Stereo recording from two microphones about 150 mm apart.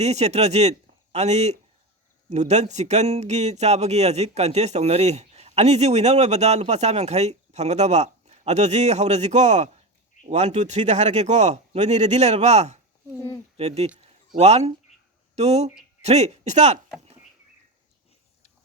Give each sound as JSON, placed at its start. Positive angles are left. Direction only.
{"t": 0.0, "sound": "speech", "side_deg": -45}